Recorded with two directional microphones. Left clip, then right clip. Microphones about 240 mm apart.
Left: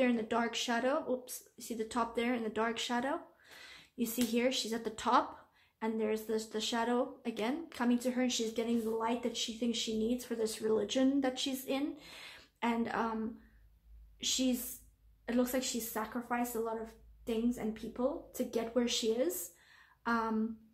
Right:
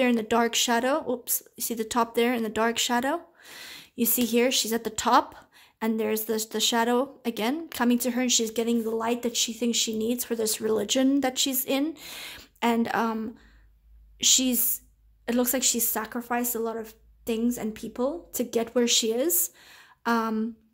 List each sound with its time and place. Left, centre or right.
0.0 s speech: right